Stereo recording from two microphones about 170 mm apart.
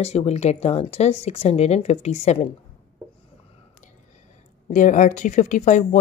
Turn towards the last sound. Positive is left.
turn(degrees=45)  # may be behind; listen again after turning